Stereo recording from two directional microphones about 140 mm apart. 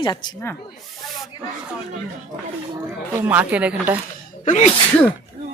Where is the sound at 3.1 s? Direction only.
15° right (ahead or behind).